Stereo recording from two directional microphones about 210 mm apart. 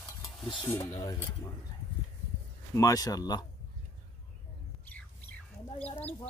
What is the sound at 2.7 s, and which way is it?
Speech, 15° left (ahead or behind).